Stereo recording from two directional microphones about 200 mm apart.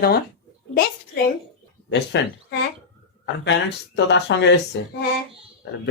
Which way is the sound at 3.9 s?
60° left (ahead or behind).